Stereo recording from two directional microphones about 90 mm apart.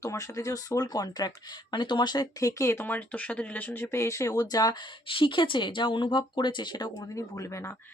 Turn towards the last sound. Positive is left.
turn(degrees=35)  # may be behind; listen again after turning